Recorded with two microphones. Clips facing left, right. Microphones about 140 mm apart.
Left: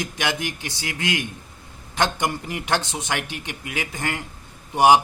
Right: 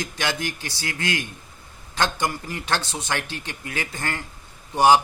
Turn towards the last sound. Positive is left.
turn(degrees=15)  # may be behind; listen again after turning